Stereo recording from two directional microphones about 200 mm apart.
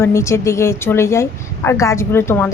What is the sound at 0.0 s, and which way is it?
A woman's voice, 15° left (ahead or behind).